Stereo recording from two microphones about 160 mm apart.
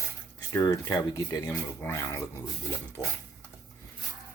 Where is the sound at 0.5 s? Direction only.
20° left (ahead or behind).